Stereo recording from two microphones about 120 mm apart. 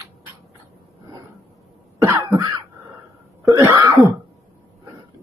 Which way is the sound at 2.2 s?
40° right (ahead or behind).